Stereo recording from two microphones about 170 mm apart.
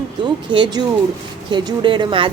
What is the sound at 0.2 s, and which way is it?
Speech, 25° right (ahead or behind).